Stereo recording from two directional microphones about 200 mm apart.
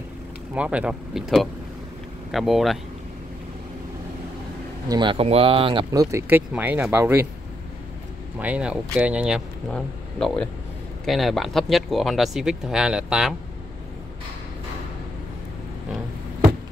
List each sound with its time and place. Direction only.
0.6 s speech: 5° right (ahead or behind)
4.8 s speech: 20° right (ahead or behind)
6.1 s speech: 10° right (ahead or behind)
8.4 s speech: 5° right (ahead or behind)